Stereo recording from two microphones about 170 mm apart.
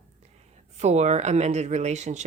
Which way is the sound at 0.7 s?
40° right (ahead or behind).